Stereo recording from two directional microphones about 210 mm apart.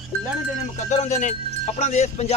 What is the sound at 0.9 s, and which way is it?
Speech, 35° left (ahead or behind).